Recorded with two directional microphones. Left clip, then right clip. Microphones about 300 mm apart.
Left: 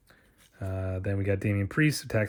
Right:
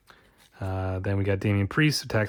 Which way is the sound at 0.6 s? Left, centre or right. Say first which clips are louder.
Right 3 dB; centre.